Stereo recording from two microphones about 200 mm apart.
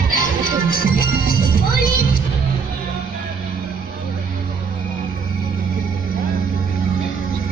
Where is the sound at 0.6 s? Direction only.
45° left (ahead or behind).